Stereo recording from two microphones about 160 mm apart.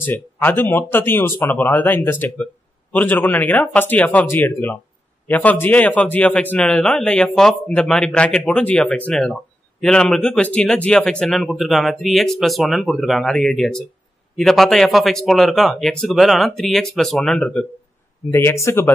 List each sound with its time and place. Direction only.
0.0 s a man's voice: 15° left (ahead or behind)
18.3 s speech: 15° left (ahead or behind)